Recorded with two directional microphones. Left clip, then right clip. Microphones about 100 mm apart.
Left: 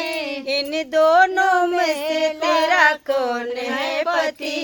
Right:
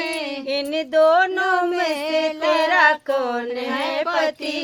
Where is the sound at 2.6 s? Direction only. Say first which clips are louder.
Even; 30° left (ahead or behind).